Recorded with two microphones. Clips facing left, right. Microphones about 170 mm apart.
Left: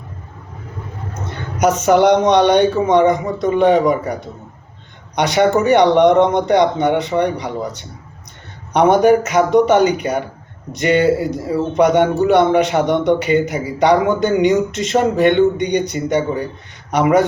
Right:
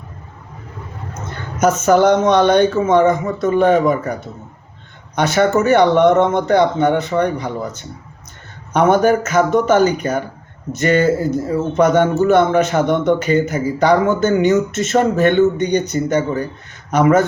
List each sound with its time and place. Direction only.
1.5 s speech: 15° left (ahead or behind)